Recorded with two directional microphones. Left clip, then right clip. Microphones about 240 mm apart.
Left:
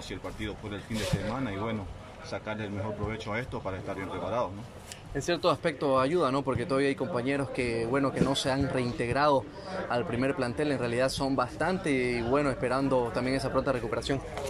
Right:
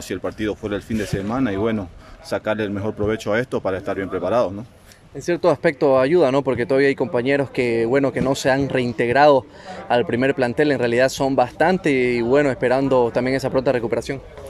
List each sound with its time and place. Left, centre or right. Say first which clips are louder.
0.1 s a man's voice: right 15 dB; right
5.2 s a man's voice: right 10 dB; right